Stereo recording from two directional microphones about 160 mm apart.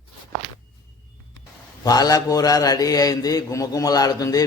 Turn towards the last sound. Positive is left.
turn(degrees=20)  # may be behind; listen again after turning